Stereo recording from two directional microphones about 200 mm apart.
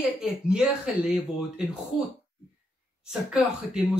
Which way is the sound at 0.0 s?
5° right (ahead or behind).